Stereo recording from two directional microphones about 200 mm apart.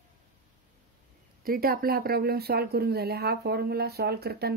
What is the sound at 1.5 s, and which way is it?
Speech, 45° right (ahead or behind).